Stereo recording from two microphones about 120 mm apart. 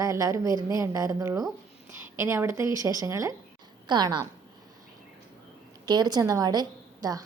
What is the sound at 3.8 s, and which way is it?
Speech, 35° right (ahead or behind).